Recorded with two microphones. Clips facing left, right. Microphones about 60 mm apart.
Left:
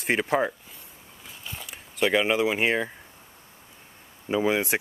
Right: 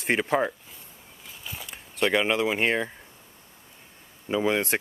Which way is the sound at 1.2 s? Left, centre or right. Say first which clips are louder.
Even; centre.